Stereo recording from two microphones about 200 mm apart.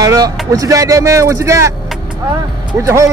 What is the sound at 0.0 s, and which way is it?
Speech, 20° right (ahead or behind).